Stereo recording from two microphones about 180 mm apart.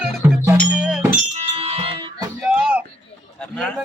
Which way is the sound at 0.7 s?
5° right (ahead or behind).